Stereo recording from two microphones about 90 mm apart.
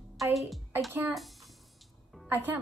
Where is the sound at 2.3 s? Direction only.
20° right (ahead or behind).